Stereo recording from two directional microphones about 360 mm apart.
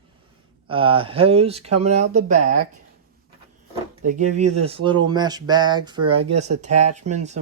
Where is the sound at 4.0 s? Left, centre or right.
Right.